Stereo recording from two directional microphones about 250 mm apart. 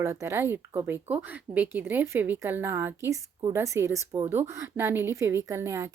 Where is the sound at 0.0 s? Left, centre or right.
Centre.